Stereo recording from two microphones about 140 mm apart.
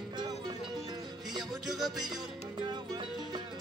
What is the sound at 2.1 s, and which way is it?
Music, 30° right (ahead or behind).